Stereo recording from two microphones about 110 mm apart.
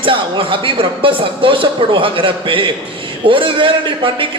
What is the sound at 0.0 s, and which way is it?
A man's voice, 50° right (ahead or behind).